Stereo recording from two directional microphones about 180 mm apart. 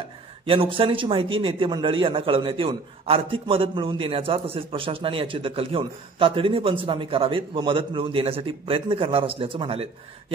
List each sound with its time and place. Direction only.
0.5 s a man's voice: 30° right (ahead or behind)